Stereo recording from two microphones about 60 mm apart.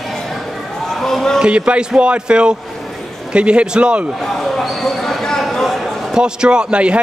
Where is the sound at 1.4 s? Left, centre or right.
Centre.